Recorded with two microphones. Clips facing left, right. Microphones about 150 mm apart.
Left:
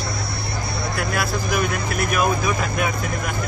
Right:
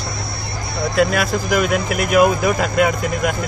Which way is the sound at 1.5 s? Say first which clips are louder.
Right 7 dB; 80° right.